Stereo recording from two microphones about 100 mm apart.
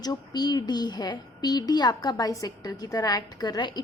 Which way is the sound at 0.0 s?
45° left (ahead or behind).